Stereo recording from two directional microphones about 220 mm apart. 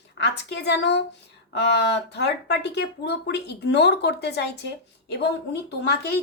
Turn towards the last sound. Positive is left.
turn(degrees=50)  # may be behind; listen again after turning